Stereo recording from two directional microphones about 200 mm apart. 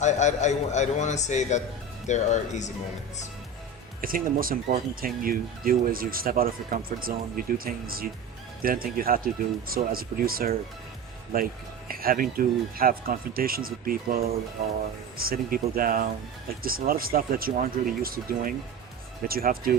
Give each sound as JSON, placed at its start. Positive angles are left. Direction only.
{"t": 0.0, "sound": "a man's voice", "side_deg": 35}
{"t": 4.0, "sound": "speech", "side_deg": -45}
{"t": 11.9, "sound": "speech", "side_deg": -45}